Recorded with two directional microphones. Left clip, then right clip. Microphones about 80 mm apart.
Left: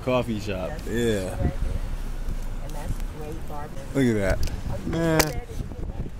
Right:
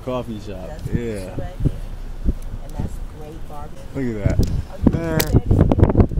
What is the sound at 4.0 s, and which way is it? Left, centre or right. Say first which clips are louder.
Speech: left 2 dB; left.